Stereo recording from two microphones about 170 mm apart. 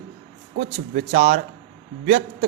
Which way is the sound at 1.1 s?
45° right (ahead or behind).